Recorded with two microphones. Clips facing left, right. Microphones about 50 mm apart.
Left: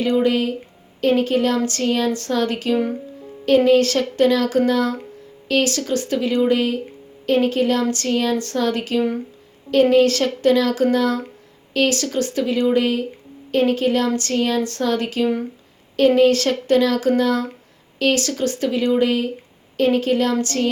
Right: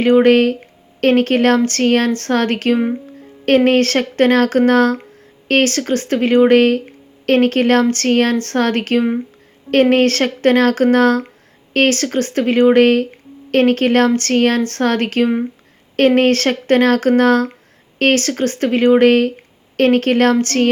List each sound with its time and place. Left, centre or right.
0.0 s speech: right